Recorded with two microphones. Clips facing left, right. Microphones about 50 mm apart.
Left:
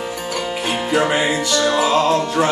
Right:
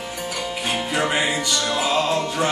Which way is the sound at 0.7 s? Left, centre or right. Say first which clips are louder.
Left 5 dB; centre.